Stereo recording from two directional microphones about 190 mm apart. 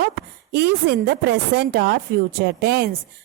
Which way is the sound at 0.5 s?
60° right (ahead or behind).